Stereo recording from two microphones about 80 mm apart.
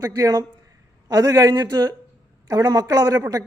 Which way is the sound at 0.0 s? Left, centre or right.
Right.